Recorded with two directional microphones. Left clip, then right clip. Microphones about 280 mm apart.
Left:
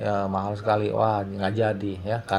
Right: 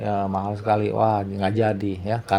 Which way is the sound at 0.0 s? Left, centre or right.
Centre.